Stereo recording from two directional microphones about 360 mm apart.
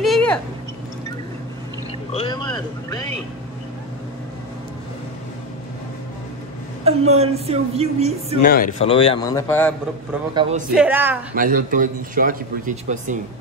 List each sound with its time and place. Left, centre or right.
0.0 s a sound: centre
2.1 s a man's voice: centre
6.8 s speech: centre
8.4 s a man's voice: left; by 9.8 s centre
10.4 s speech: centre
11.3 s speech: right